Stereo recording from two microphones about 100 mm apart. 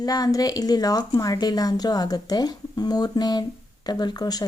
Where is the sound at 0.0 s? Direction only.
40° left (ahead or behind).